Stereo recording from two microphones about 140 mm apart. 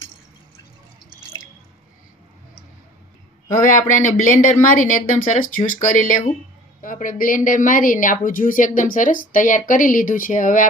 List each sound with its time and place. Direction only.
3.8 s a woman's voice: 70° left (ahead or behind)